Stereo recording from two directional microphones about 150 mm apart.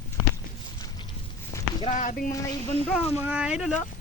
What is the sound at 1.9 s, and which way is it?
Speech, 60° left (ahead or behind).